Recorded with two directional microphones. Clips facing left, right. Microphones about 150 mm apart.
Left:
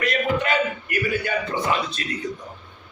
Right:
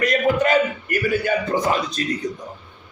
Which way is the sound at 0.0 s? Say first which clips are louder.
Right 5 dB; 40° right (ahead or behind).